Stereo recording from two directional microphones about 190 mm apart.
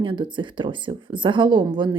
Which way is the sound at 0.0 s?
25° right (ahead or behind).